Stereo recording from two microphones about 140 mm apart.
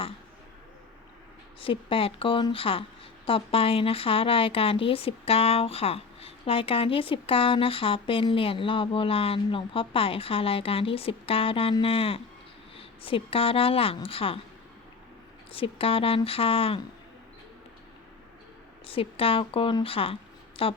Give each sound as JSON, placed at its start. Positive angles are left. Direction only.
{"t": 1.6, "sound": "a woman's voice", "side_deg": 40}
{"t": 15.5, "sound": "a woman's voice", "side_deg": 40}
{"t": 18.9, "sound": "a woman's voice", "side_deg": 40}